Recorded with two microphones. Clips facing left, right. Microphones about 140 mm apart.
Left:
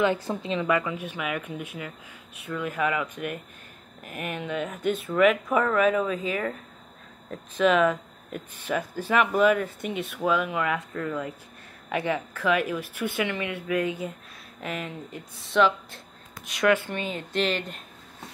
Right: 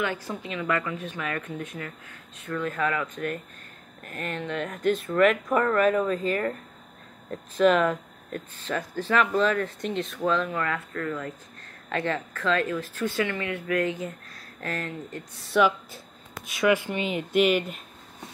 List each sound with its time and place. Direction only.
0.0 s a woman's voice: 25° left (ahead or behind)
0.7 s speech: 15° left (ahead or behind)
8.5 s speech: 10° left (ahead or behind)
15.4 s speech: 5° right (ahead or behind)
16.7 s speech: 10° right (ahead or behind)